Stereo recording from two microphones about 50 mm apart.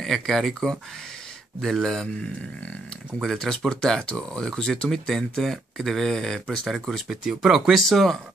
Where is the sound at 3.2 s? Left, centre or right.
Centre.